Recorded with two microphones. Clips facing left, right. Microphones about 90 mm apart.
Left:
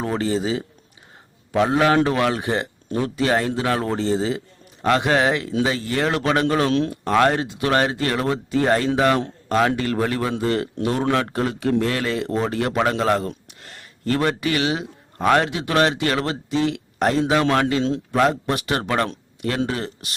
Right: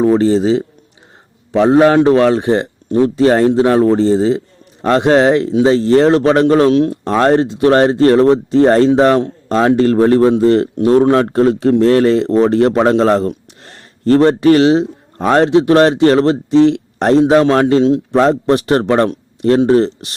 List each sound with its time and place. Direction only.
0.3 s speech: 30° right (ahead or behind)
17.9 s speech: 25° right (ahead or behind)